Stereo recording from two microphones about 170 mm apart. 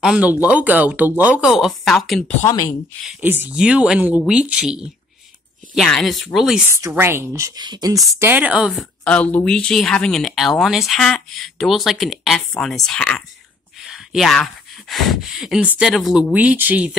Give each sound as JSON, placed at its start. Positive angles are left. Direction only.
{"t": 0.0, "sound": "speech", "side_deg": -5}
{"t": 3.1, "sound": "speech", "side_deg": -10}
{"t": 6.7, "sound": "speech", "side_deg": -15}
{"t": 8.2, "sound": "speech", "side_deg": -10}
{"t": 9.0, "sound": "speech", "side_deg": 5}